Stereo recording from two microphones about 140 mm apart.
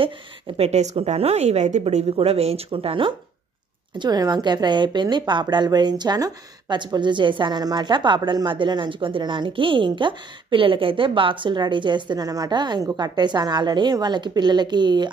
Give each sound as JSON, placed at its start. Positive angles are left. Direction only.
{"t": 0.0, "sound": "a woman's voice", "side_deg": -45}